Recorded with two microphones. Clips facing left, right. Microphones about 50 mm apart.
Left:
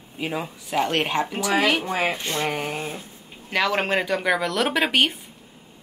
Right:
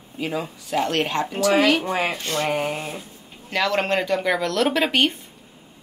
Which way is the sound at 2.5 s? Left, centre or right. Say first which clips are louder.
Right 4 dB; centre.